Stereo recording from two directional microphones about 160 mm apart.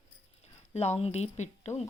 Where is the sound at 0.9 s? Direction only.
40° left (ahead or behind).